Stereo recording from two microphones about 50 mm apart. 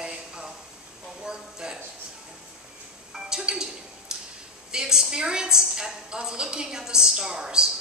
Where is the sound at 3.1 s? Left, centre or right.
Centre.